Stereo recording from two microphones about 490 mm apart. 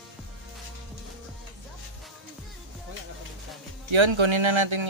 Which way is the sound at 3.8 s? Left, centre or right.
Right.